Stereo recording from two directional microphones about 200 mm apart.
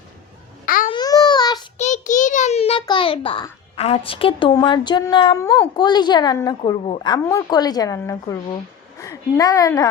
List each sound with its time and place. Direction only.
0.6 s babbling: 45° left (ahead or behind)
0.9 s a sound: 20° left (ahead or behind)
1.8 s a child's voice: 40° left (ahead or behind); by 6.6 s 20° left (ahead or behind)
6.6 s a woman's voice: 30° left (ahead or behind)